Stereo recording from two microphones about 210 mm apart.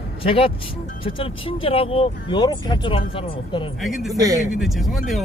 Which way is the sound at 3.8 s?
Centre (ahead or behind).